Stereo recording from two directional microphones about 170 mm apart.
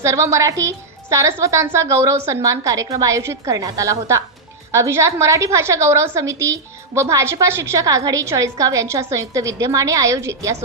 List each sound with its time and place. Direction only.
0.0 s a woman's voice: 15° right (ahead or behind)